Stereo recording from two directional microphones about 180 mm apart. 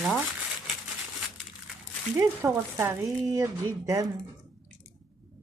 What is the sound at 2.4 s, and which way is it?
Speech, 15° right (ahead or behind).